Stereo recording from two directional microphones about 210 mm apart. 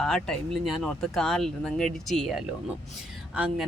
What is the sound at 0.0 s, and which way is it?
A woman's voice, centre (ahead or behind).